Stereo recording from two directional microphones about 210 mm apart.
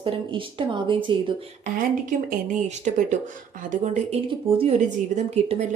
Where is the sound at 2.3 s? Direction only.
35° right (ahead or behind).